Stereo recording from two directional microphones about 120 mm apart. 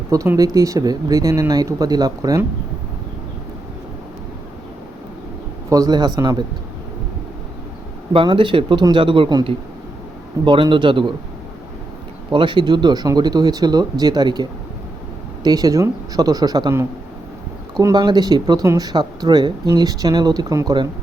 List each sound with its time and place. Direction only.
0.3 s speech: 30° right (ahead or behind)
5.6 s speech: 30° right (ahead or behind)
8.1 s speech: 45° right (ahead or behind)
12.3 s speech: 45° right (ahead or behind)
15.4 s speech: 30° right (ahead or behind)